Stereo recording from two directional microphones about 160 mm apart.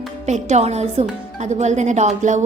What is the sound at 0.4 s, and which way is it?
A woman's voice, 45° right (ahead or behind).